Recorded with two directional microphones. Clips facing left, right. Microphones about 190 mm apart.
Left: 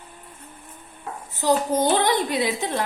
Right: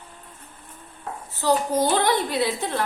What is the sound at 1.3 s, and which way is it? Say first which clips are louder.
A woman's voice: left 1 dB; 20° left (ahead or behind).